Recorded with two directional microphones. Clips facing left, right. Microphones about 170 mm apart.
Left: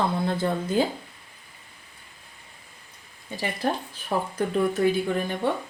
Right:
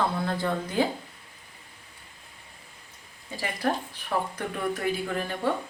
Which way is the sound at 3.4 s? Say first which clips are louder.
Left 1 dB; 25° left (ahead or behind).